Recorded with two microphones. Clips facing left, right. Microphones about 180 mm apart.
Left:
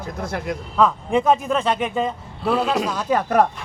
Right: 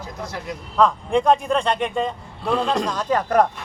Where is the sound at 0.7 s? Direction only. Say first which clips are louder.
Even; 5° left (ahead or behind).